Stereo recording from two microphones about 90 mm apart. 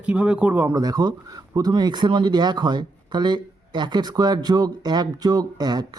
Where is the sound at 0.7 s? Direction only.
45° right (ahead or behind).